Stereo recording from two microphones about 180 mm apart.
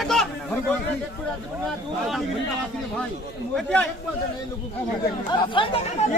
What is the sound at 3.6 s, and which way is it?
Speech, 5° left (ahead or behind).